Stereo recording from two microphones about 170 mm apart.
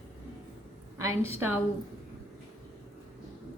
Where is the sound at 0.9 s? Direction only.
20° right (ahead or behind).